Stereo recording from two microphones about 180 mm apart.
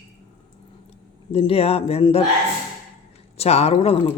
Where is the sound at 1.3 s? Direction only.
30° left (ahead or behind).